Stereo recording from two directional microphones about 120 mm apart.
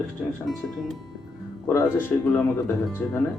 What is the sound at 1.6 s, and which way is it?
Speech, 20° left (ahead or behind).